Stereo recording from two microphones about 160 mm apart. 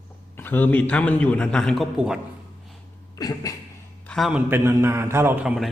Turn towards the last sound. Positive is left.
turn(degrees=-5)  # may be behind; listen again after turning